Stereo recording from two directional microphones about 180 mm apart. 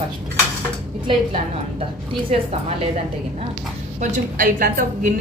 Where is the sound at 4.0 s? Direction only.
50° right (ahead or behind).